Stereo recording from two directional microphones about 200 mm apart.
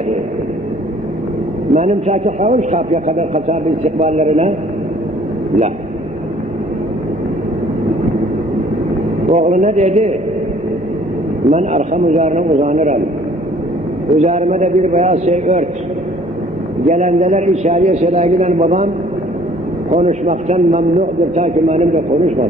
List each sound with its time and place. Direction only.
1.7 s a man's voice: 35° right (ahead or behind)
9.2 s a man's voice: 35° right (ahead or behind)
11.5 s a man's voice: 35° right (ahead or behind)
14.1 s a man's voice: 35° right (ahead or behind)
16.8 s a man's voice: 35° right (ahead or behind)
19.9 s a man's voice: 35° right (ahead or behind)